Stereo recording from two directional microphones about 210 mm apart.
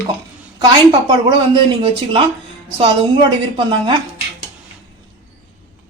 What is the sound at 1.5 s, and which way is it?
A woman's voice, 25° right (ahead or behind).